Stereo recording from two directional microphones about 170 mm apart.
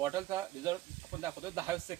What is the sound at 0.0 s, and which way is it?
A man's voice, 20° right (ahead or behind).